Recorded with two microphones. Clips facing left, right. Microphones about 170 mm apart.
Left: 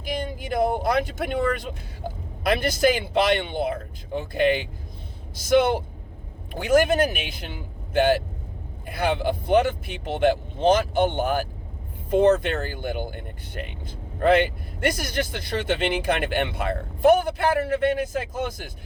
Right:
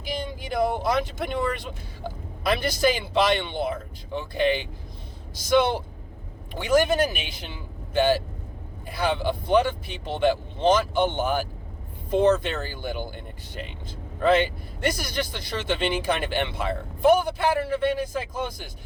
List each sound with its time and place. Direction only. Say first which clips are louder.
0.1 s speech: left 2 dB; 50° left (ahead or behind)